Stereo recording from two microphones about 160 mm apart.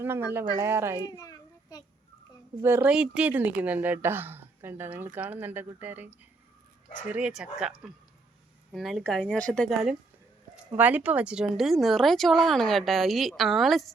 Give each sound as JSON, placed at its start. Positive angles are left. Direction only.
{"t": 0.0, "sound": "speech", "side_deg": -15}
{"t": 1.0, "sound": "a sound", "side_deg": 25}
{"t": 2.6, "sound": "speech", "side_deg": -15}